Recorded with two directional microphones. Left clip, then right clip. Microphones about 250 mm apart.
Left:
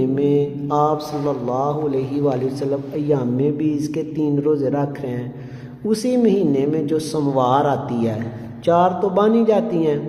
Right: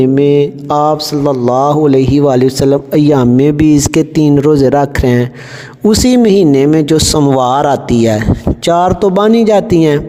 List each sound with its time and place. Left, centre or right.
0.0 s speech: right